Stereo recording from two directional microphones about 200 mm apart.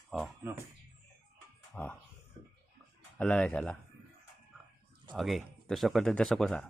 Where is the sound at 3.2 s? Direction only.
5° left (ahead or behind).